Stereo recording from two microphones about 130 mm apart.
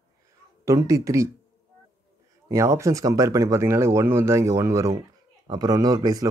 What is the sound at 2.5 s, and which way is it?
Speech, 25° right (ahead or behind).